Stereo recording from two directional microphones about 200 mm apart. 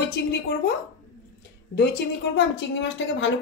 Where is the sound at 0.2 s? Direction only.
55° left (ahead or behind).